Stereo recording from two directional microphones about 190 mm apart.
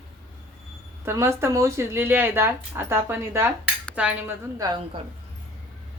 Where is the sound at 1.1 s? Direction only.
15° right (ahead or behind).